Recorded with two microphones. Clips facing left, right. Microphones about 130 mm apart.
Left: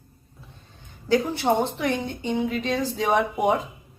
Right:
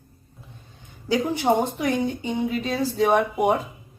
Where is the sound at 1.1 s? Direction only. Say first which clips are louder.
Even; 15° right (ahead or behind).